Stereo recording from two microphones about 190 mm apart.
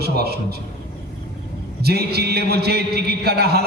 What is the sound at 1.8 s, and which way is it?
A man's voice, 55° right (ahead or behind).